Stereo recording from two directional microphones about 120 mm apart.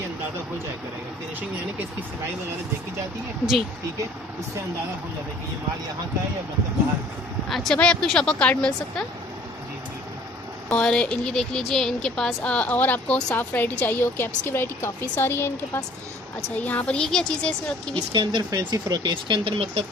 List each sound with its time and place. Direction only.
7.5 s speech: 5° left (ahead or behind)
10.7 s speech: 10° left (ahead or behind)
16.6 s speech: 10° left (ahead or behind)
18.1 s speech: 40° right (ahead or behind)